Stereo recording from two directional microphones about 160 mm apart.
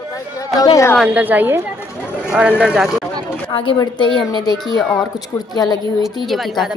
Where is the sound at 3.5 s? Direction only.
30° left (ahead or behind).